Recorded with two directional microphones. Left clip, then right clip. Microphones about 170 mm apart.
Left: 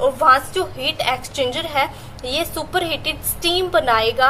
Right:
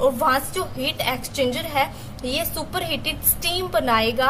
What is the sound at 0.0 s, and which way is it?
A woman's voice, 20° right (ahead or behind).